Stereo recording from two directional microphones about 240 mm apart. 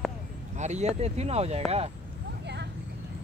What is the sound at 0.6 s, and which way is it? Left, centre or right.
Speech, right.